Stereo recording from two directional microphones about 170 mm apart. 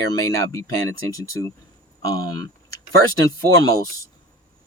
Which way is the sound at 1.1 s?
20° left (ahead or behind).